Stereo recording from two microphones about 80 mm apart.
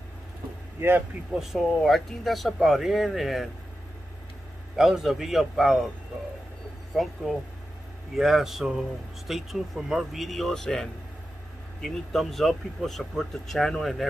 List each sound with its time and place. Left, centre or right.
0.7 s speech: right
1.3 s speech: centre
4.7 s speech: centre
7.0 s speech: centre